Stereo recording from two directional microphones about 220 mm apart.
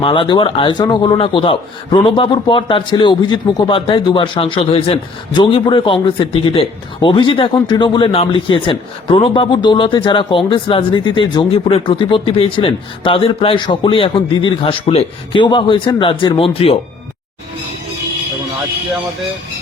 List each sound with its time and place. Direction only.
0.0 s a man's voice: 20° left (ahead or behind)